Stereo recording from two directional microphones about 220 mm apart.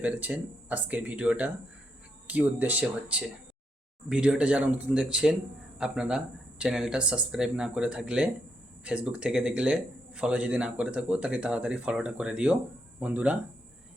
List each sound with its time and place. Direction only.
0.0 s speech: 5° right (ahead or behind)